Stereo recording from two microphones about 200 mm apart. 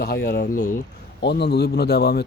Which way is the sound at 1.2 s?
55° left (ahead or behind).